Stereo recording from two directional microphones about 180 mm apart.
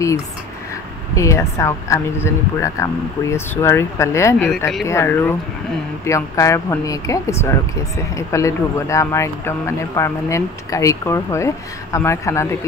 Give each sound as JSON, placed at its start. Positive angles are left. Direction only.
{"t": 1.1, "sound": "speech", "side_deg": 15}